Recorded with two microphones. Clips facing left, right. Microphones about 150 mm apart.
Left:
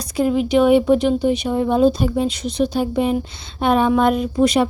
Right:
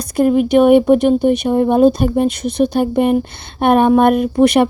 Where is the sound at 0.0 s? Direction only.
55° right (ahead or behind).